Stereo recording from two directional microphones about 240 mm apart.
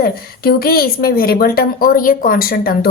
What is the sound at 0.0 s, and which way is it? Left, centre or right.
A woman's voice, left.